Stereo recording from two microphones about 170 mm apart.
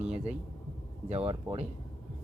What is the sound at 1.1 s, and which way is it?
Speech, 35° right (ahead or behind).